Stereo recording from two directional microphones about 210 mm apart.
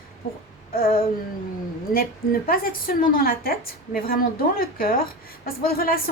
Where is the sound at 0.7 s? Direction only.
45° left (ahead or behind).